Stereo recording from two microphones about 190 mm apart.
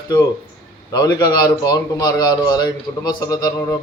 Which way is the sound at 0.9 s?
20° left (ahead or behind).